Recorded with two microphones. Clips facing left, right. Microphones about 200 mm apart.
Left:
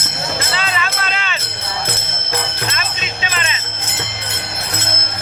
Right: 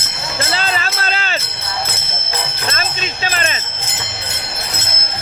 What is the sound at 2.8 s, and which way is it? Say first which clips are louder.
Jingle bell: right 2 dB; 40° right (ahead or behind).